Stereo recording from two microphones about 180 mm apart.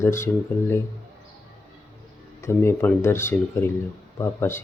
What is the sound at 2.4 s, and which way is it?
Speech, 15° left (ahead or behind).